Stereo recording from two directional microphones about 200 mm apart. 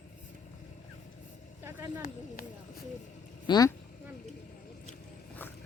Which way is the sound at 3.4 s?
20° left (ahead or behind).